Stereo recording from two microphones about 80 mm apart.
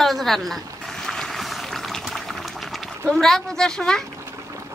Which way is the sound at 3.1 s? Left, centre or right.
Centre.